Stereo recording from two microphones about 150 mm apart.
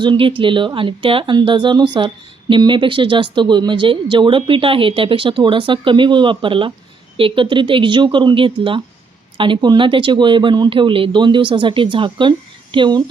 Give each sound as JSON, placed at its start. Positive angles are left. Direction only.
{"t": 0.0, "sound": "speech", "side_deg": -35}